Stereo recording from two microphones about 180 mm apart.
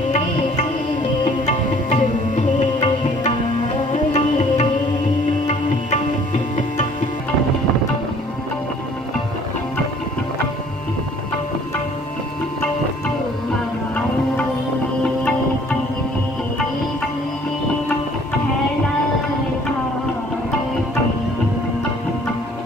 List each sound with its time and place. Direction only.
1.2 s music: 40° left (ahead or behind)